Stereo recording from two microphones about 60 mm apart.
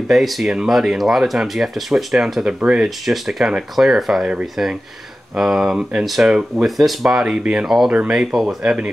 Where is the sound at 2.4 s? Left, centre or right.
Centre.